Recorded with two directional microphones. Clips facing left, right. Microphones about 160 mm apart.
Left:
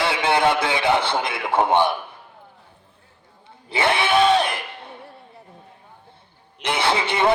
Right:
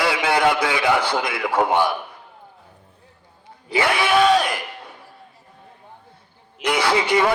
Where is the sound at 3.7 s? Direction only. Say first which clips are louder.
Right 1 dB; 25° left (ahead or behind).